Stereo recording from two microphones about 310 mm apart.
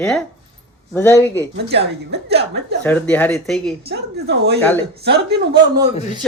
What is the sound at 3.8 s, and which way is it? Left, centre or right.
Speech, right.